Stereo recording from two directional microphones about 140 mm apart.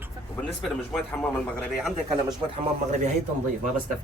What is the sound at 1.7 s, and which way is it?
Speech, centre (ahead or behind).